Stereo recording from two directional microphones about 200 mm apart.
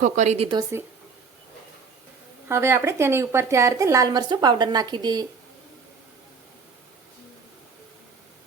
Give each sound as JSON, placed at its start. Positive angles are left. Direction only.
{"t": 0.0, "sound": "speech", "side_deg": -35}
{"t": 2.5, "sound": "a woman's voice", "side_deg": -15}